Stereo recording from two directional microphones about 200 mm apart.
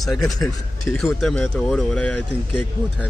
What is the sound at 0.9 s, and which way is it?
Speech, centre (ahead or behind).